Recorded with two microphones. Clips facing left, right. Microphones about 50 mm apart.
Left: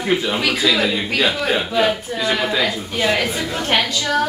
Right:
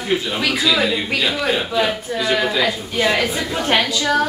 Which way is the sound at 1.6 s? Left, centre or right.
Centre.